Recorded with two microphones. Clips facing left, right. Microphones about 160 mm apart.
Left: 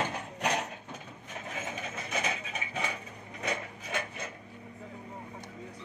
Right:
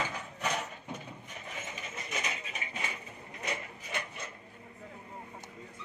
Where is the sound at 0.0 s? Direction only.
65° left (ahead or behind).